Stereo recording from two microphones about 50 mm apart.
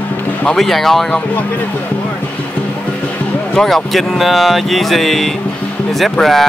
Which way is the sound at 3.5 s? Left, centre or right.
Centre.